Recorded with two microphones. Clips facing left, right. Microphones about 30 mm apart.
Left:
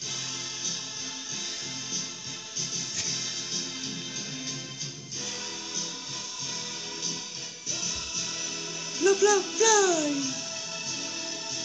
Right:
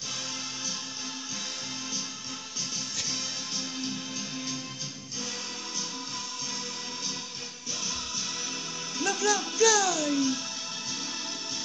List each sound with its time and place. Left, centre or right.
3.0 s music: right
8.9 s a man's voice: right